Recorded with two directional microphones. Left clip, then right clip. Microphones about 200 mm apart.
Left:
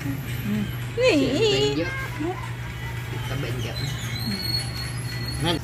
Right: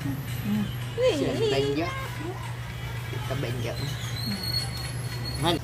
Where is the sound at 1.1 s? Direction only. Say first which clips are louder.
Left 5 dB; 35° left (ahead or behind).